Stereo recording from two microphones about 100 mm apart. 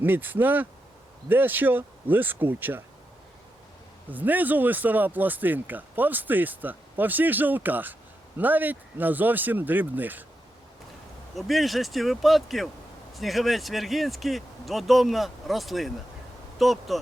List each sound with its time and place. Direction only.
0.0 s speech: 20° right (ahead or behind)
4.1 s speech: 15° right (ahead or behind)
11.3 s speech: centre (ahead or behind)